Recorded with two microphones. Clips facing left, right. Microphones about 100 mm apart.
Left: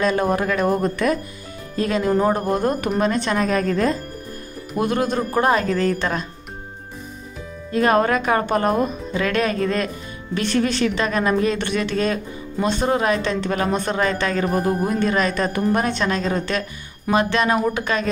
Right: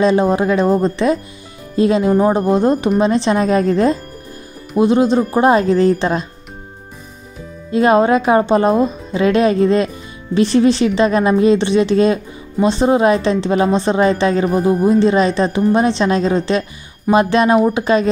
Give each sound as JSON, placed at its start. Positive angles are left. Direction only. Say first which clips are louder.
{"t": 0.0, "sound": "speech", "louder": "right 6 dB", "side_deg": -25}
{"t": 7.7, "sound": "speech", "louder": "right 5 dB", "side_deg": -25}
{"t": 14.4, "sound": "speech", "louder": "right 6 dB", "side_deg": -10}
{"t": 14.9, "sound": "speech", "louder": "right 8 dB", "side_deg": -25}